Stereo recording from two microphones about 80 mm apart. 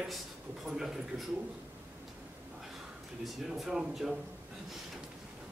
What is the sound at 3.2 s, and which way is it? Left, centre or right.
Speech, centre.